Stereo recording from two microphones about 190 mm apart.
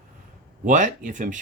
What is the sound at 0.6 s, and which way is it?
Speech, 40° right (ahead or behind).